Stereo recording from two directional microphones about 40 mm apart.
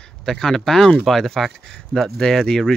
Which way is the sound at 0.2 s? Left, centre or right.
Centre.